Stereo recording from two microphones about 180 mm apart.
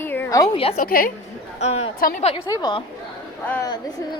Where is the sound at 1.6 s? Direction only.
35° left (ahead or behind).